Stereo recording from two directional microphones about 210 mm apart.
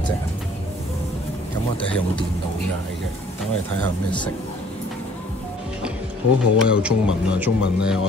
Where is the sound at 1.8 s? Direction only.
25° left (ahead or behind).